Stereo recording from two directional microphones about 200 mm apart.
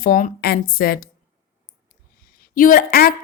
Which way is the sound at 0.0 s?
45° left (ahead or behind).